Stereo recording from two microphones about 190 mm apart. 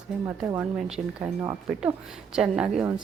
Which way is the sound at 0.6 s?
5° right (ahead or behind).